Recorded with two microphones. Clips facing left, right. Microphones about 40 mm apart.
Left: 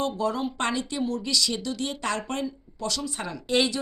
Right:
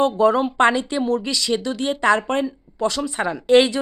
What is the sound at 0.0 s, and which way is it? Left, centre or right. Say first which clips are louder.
Speech: right 10 dB; right.